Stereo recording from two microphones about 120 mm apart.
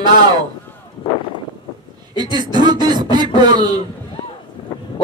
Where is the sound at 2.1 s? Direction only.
35° right (ahead or behind).